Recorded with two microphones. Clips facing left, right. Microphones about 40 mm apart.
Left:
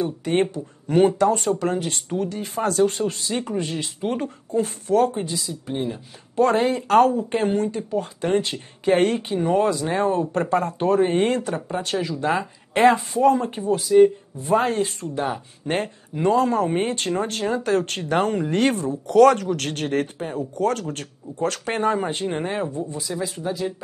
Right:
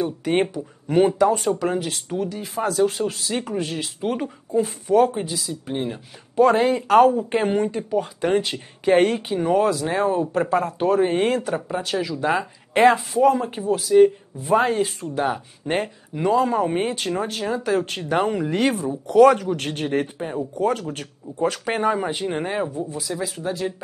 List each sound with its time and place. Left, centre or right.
0.0 s speech: centre
5.5 s speech: centre
6.3 s speech: centre
7.5 s speech: right
7.9 s speech: centre
16.7 s speech: centre
19.5 s speech: right; by 23.5 s centre